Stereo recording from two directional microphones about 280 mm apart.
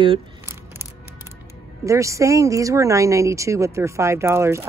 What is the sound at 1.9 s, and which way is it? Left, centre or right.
Speech, centre.